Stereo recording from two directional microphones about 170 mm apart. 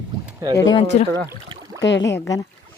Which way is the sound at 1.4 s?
25° right (ahead or behind).